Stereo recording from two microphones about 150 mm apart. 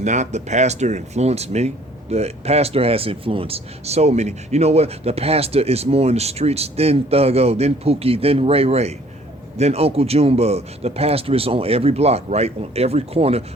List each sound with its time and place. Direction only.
0.0 s speech: 50° right (ahead or behind)